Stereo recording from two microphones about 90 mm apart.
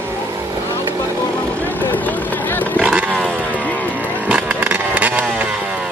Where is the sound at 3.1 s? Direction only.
10° left (ahead or behind).